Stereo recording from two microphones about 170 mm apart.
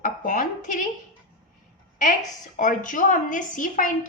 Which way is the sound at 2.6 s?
50° left (ahead or behind).